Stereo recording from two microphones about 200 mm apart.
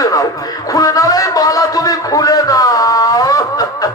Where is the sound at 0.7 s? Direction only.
15° left (ahead or behind).